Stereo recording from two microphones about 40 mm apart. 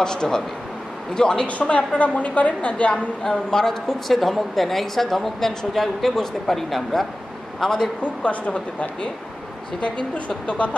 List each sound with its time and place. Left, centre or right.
0.0 s a man's voice: centre
1.4 s a woman's voice: left
2.9 s a man's voice: centre
8.0 s a woman's voice: left